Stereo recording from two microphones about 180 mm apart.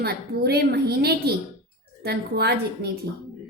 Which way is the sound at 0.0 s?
60° right (ahead or behind).